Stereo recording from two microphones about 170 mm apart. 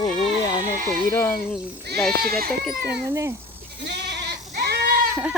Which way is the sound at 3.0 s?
15° right (ahead or behind).